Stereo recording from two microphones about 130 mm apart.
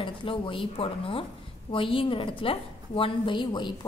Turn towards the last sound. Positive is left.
turn(degrees=35)  # may be behind; listen again after turning